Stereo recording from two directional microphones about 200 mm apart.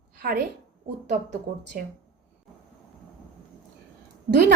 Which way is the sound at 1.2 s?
55° right (ahead or behind).